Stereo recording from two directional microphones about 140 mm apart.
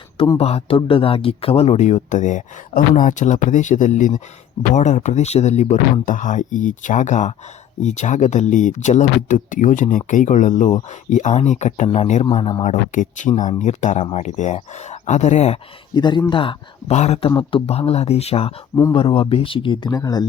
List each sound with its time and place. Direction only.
0.3 s speech: 45° left (ahead or behind)
12.2 s speech: 40° left (ahead or behind)
12.9 s speech: 65° left (ahead or behind)
16.0 s speech: 30° left (ahead or behind)
16.9 s speech: 50° left (ahead or behind); by 20.2 s 25° left (ahead or behind)